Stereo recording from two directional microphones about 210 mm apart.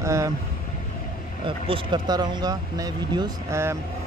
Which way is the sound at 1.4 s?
20° right (ahead or behind).